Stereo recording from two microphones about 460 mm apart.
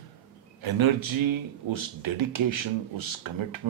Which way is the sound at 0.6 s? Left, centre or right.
Right.